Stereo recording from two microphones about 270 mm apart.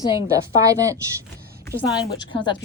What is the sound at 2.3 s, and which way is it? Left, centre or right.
Speech, centre.